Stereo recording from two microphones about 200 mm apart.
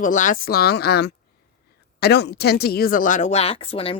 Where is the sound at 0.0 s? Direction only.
40° left (ahead or behind).